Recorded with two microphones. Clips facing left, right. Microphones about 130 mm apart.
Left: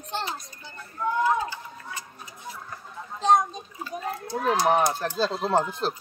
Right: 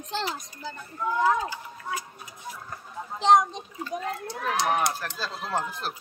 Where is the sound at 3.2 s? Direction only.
90° right.